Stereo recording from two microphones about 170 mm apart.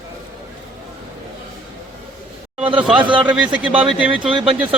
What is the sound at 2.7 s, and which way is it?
Speech, 10° right (ahead or behind).